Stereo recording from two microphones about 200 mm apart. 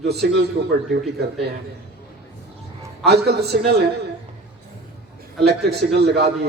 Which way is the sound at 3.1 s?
55° right (ahead or behind).